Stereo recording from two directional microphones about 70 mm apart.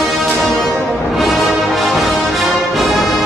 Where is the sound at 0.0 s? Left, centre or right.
Centre.